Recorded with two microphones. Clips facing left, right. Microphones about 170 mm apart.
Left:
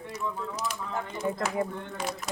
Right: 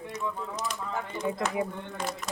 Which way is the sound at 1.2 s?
5° left (ahead or behind).